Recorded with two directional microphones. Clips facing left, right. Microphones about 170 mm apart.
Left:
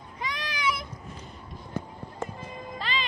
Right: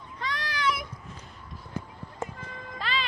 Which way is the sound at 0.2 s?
15° left (ahead or behind).